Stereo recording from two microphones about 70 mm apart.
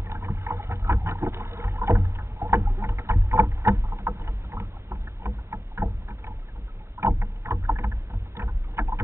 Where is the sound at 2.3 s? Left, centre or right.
Right.